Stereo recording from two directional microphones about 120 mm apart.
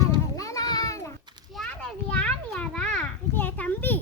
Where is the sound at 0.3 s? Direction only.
30° left (ahead or behind).